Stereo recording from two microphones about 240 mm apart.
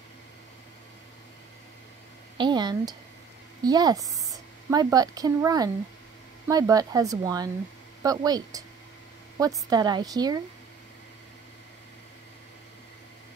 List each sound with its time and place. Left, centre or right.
2.3 s speech: centre
9.7 s speech: centre